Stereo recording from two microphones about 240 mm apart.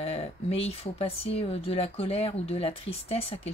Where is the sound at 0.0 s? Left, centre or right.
Left.